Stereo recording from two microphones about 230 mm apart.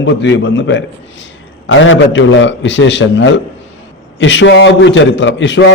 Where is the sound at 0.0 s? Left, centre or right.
Left.